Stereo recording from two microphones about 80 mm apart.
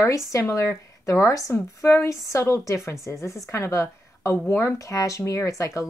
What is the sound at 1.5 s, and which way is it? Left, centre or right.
Speech, left.